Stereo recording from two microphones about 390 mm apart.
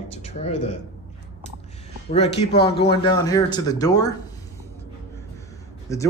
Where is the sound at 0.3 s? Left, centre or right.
Left.